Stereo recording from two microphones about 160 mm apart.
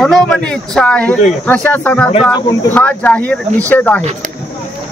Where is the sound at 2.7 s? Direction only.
10° left (ahead or behind).